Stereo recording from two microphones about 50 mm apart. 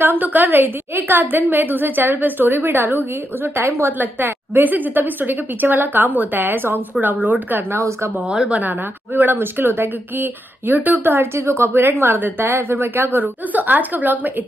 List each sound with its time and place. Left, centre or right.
0.0 s a woman's voice: right
7.7 s speech: right
8.5 s a woman's voice: right
9.1 s speech: right
11.3 s speech: right